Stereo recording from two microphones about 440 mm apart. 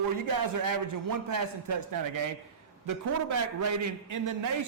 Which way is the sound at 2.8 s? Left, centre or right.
Right.